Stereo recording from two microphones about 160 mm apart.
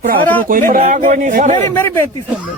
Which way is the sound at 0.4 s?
60° right (ahead or behind).